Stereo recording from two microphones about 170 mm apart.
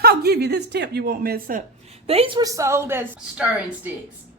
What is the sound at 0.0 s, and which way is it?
Speech, 65° right (ahead or behind).